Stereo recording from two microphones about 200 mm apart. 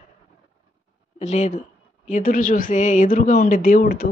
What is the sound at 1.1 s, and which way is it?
A woman's voice, 35° left (ahead or behind).